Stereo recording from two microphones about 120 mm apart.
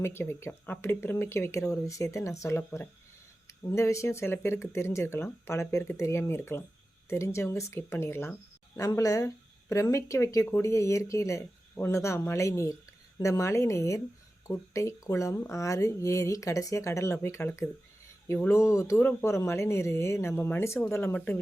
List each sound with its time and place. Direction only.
0.0 s speech: 20° left (ahead or behind)